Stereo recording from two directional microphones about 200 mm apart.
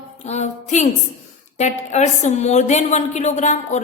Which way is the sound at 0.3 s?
35° left (ahead or behind).